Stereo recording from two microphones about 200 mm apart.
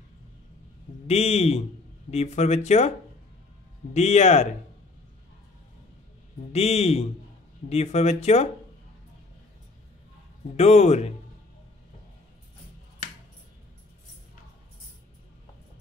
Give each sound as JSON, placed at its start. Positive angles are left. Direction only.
{"t": 1.0, "sound": "speech", "side_deg": 30}
{"t": 3.9, "sound": "speech", "side_deg": 35}
{"t": 6.5, "sound": "speech", "side_deg": 30}
{"t": 10.5, "sound": "speech", "side_deg": 35}